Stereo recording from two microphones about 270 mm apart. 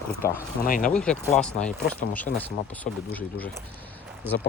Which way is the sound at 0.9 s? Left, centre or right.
Centre.